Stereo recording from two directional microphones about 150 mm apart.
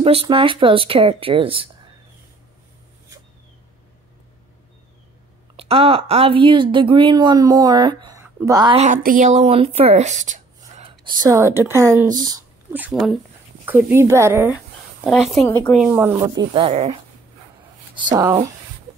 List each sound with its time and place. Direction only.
0.0 s speech: 40° right (ahead or behind)
5.6 s speech: 40° right (ahead or behind)
8.2 s a sound: 20° right (ahead or behind)
8.7 s speech: 55° right (ahead or behind)
10.8 s speech: 30° right (ahead or behind)
13.7 s speech: 15° right (ahead or behind)
15.0 s speech: centre (ahead or behind)
15.4 s speech: 20° left (ahead or behind)
15.8 s speech: 10° right (ahead or behind)
16.3 s speech: 40° right (ahead or behind)
17.9 s speech: 30° right (ahead or behind)